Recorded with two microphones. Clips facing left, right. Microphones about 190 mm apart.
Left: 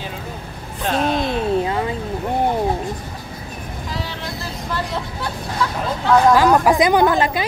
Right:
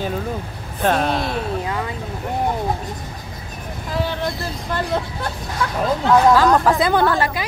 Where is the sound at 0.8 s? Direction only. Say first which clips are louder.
Right 1 dB; 50° right (ahead or behind).